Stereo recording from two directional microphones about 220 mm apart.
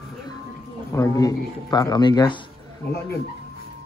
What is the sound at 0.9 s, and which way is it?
Speech, 15° left (ahead or behind).